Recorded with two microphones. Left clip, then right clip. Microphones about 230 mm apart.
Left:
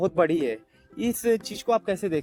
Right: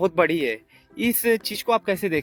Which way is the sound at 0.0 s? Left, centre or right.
Right.